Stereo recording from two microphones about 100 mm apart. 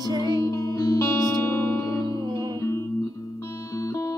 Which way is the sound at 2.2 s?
50° right (ahead or behind).